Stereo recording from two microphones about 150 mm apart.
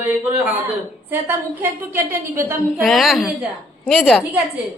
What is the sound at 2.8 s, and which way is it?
A woman's voice, centre (ahead or behind).